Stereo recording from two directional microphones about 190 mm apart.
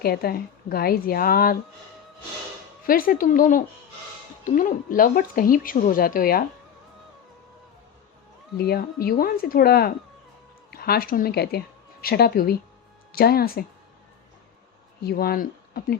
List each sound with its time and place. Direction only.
0.0 s speech: 55° left (ahead or behind)
2.8 s speech: 50° left (ahead or behind)
8.5 s a woman's voice: 55° left (ahead or behind)
15.0 s speech: 50° left (ahead or behind)